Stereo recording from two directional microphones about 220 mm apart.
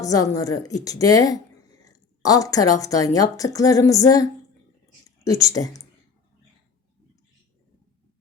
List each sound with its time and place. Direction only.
0.0 s a woman's voice: 15° left (ahead or behind)